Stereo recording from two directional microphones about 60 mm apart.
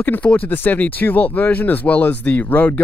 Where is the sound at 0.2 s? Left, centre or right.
Left.